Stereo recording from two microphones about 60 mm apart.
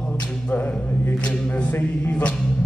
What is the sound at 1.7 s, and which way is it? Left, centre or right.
Music, left.